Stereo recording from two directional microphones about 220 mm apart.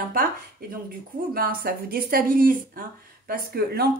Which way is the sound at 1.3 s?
40° right (ahead or behind).